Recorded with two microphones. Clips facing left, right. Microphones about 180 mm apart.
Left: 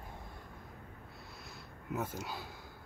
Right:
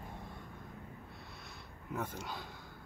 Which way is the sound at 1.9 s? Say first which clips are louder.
Left 2 dB; 5° left (ahead or behind).